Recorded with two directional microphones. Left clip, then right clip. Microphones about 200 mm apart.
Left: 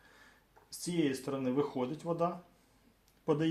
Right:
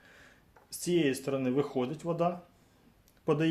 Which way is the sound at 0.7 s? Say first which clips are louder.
Right 5 dB; 35° right (ahead or behind).